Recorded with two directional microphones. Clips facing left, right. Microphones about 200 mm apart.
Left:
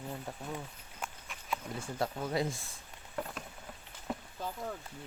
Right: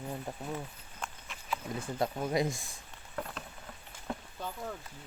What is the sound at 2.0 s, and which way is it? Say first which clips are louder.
Speech: right 2 dB; 15° right (ahead or behind).